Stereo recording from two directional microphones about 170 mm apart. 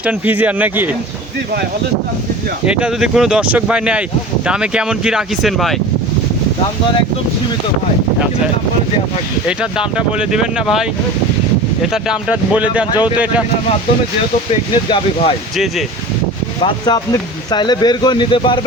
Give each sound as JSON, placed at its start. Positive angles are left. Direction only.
{"t": 0.0, "sound": "speech", "side_deg": -10}
{"t": 2.6, "sound": "speech", "side_deg": -5}
{"t": 9.5, "sound": "speech", "side_deg": -5}
{"t": 14.5, "sound": "speech", "side_deg": 30}
{"t": 16.6, "sound": "speech", "side_deg": 25}